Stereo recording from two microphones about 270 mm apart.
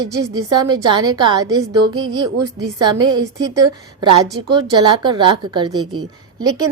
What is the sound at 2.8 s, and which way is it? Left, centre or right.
A woman's voice, centre.